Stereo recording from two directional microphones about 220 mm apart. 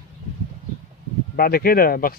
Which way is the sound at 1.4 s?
45° left (ahead or behind).